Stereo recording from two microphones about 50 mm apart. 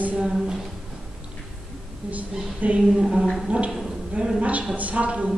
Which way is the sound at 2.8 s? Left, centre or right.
Centre.